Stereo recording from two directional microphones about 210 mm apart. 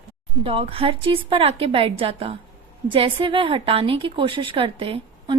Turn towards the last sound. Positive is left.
turn(degrees=-25)  # may be behind; listen again after turning